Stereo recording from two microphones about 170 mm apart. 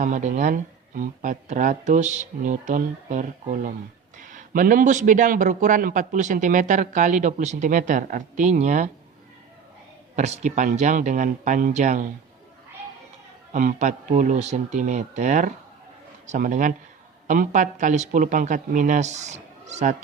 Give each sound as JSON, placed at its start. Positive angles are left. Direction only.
{"t": 0.0, "sound": "a man's voice", "side_deg": -45}
{"t": 10.2, "sound": "a man's voice", "side_deg": -45}
{"t": 13.5, "sound": "a man's voice", "side_deg": -50}